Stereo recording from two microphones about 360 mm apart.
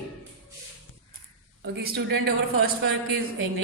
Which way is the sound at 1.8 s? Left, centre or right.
Right.